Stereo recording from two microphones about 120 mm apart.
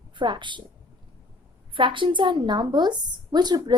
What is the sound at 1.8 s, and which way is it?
A woman's voice, 45° right (ahead or behind).